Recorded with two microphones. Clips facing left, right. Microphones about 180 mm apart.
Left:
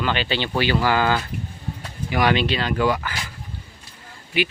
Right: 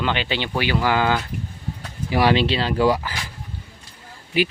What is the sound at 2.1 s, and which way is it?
Speech, 30° right (ahead or behind).